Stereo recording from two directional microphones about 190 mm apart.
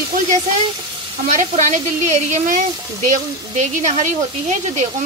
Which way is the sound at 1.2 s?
40° right (ahead or behind).